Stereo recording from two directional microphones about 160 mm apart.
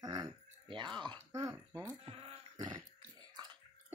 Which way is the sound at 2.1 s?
30° right (ahead or behind).